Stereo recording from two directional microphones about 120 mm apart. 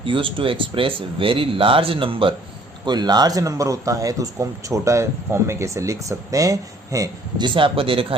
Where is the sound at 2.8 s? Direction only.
35° right (ahead or behind).